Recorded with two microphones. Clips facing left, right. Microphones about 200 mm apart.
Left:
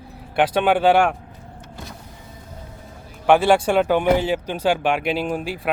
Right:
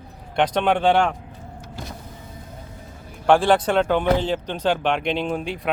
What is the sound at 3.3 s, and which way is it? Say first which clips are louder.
Speech: left 1 dB; 5° left (ahead or behind).